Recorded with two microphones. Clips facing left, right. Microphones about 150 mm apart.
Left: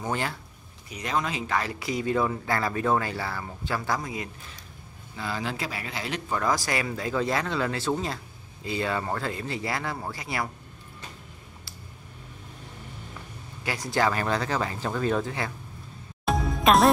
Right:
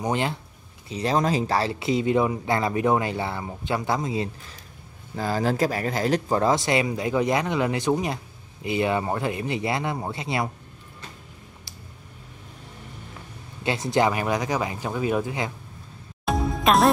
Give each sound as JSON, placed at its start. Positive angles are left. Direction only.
{"t": 0.0, "sound": "speech", "side_deg": -20}
{"t": 0.8, "sound": "speech", "side_deg": -30}
{"t": 5.1, "sound": "speech", "side_deg": -40}
{"t": 13.7, "sound": "speech", "side_deg": -25}
{"t": 16.3, "sound": "music", "side_deg": 0}